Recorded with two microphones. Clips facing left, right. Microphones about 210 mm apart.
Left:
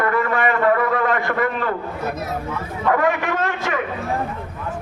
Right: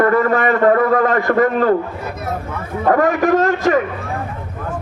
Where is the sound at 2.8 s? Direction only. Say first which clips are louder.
Right 5 dB; 45° right (ahead or behind).